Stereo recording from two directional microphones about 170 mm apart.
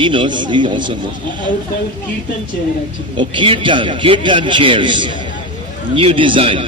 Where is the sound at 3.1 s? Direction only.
30° right (ahead or behind).